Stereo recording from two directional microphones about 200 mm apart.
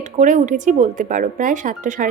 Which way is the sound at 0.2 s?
40° right (ahead or behind).